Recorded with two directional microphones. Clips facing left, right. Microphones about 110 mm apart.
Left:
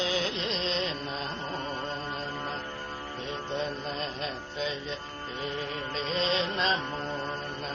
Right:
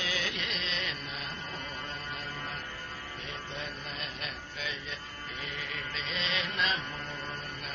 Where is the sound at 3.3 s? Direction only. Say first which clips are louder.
Left 9 dB; 30° left (ahead or behind).